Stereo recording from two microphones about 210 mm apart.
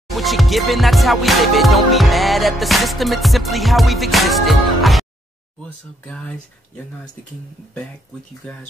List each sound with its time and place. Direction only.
0.1 s music: centre (ahead or behind)
6.0 s speech: 5° left (ahead or behind)